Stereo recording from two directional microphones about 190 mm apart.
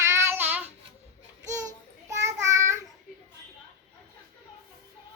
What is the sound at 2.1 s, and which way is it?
Child singing, 15° right (ahead or behind).